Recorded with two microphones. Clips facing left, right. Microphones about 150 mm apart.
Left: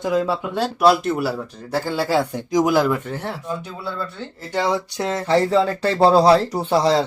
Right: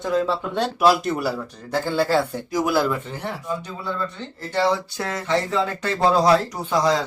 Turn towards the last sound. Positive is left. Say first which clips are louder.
# left 3 dB
turn(degrees=30)  # may be behind; listen again after turning